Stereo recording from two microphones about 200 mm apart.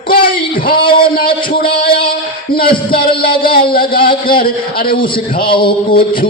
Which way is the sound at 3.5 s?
45° left (ahead or behind).